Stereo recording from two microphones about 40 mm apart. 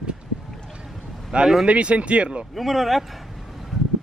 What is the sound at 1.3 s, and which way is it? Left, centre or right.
Speech, right.